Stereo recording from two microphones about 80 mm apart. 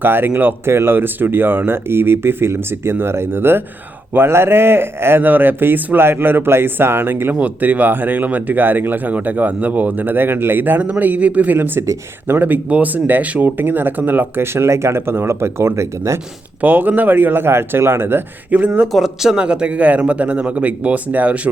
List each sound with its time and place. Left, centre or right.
0.0 s speech: right
16.6 s speech: right
18.9 s a man's voice: centre